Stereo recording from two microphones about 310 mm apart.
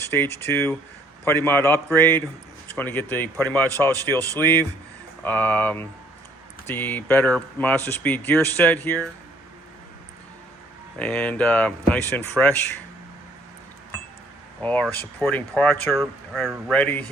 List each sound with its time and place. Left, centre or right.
0.0 s a sound: centre
0.4 s speech: centre
10.9 s speech: centre
14.6 s speech: centre